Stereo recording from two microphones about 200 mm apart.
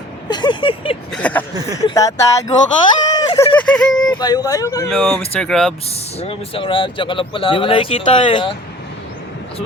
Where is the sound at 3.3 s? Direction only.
5° left (ahead or behind).